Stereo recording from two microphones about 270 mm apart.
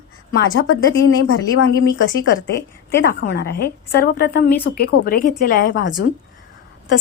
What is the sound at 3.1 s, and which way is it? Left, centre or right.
A woman's voice, left.